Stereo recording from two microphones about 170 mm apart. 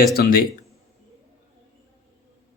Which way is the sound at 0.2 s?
60° left (ahead or behind).